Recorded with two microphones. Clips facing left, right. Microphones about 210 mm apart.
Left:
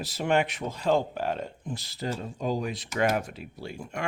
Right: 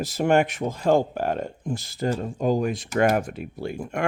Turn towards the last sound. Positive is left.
turn(degrees=-55)  # may be behind; listen again after turning